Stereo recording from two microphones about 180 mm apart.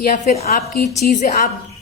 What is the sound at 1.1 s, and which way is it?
Speech, 40° left (ahead or behind).